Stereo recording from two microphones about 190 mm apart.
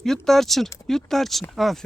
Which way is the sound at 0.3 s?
Centre (ahead or behind).